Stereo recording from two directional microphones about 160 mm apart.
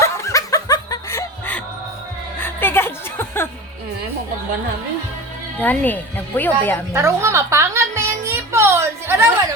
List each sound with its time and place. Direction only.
0.0 s snicker: 20° left (ahead or behind)
2.4 s music: 15° left (ahead or behind)
5.5 s speech: 10° left (ahead or behind)
6.9 s music: 20° right (ahead or behind)